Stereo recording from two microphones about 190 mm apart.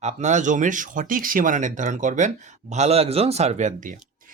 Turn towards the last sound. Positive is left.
turn(degrees=-40)  # may be behind; listen again after turning